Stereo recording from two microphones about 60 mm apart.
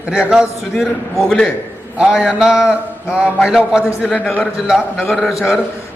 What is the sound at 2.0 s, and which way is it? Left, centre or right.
A man's voice, centre.